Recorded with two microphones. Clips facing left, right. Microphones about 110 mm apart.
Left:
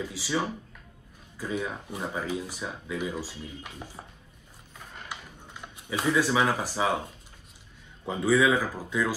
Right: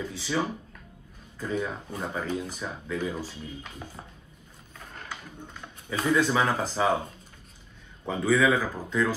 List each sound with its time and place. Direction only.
0.0 s speech: 10° left (ahead or behind)
1.4 s speech: 5° left (ahead or behind)
4.7 s a sound: 10° left (ahead or behind)
8.1 s speech: 10° left (ahead or behind)